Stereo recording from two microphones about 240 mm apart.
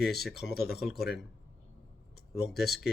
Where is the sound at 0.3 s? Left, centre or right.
Left.